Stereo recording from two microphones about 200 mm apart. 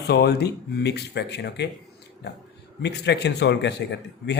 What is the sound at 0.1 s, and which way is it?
Speech, 55° left (ahead or behind).